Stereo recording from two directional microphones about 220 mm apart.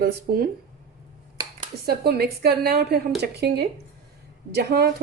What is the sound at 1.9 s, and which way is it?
A woman's voice, 45° right (ahead or behind).